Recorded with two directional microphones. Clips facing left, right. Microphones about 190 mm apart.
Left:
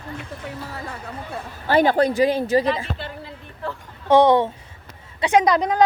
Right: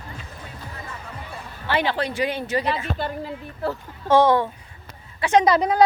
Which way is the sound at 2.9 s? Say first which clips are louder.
Right 6 dB; 40° right (ahead or behind).